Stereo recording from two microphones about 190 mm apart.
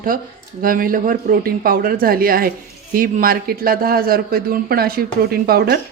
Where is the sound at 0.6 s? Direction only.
50° right (ahead or behind).